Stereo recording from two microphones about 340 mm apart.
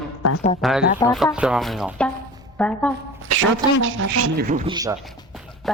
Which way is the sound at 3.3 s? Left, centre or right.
Right.